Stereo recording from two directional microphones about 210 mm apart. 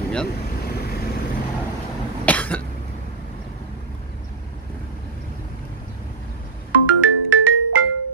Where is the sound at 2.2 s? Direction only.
5° left (ahead or behind).